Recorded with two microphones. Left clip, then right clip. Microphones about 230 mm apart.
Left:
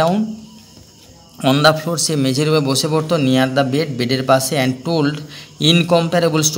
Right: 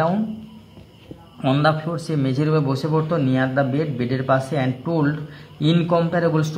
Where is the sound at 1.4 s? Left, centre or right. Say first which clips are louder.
Left 6 dB; left.